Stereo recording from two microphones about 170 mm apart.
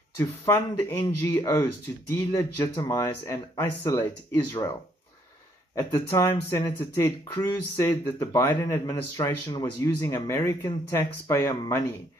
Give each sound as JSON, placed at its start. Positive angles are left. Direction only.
{"t": 0.2, "sound": "speech", "side_deg": 10}
{"t": 5.8, "sound": "speech", "side_deg": 15}